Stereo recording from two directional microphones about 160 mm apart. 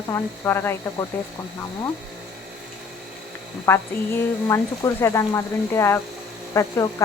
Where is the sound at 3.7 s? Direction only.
15° left (ahead or behind).